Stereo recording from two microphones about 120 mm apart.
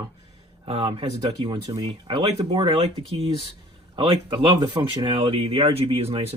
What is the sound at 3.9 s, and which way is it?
Speech, 40° right (ahead or behind).